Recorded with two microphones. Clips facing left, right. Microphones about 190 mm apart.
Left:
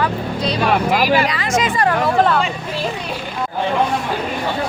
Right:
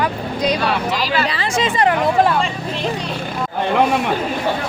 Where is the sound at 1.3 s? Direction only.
30° right (ahead or behind).